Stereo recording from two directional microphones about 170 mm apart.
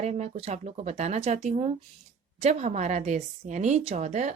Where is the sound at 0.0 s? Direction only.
40° right (ahead or behind).